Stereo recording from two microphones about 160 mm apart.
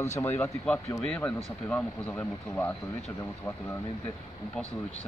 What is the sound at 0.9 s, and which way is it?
Speech, 5° left (ahead or behind).